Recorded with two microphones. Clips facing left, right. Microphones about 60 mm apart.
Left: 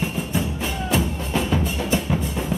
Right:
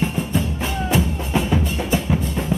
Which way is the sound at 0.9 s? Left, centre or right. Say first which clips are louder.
Right 2 dB; centre.